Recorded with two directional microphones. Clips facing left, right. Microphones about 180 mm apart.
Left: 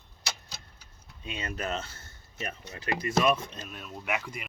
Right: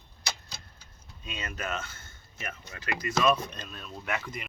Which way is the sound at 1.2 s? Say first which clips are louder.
Left 2 dB; 30° left (ahead or behind).